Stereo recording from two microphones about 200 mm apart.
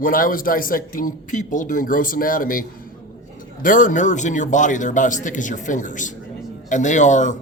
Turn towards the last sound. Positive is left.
turn(degrees=40)  # may be behind; listen again after turning